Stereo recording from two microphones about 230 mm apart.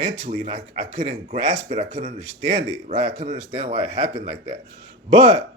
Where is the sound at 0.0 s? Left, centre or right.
Right.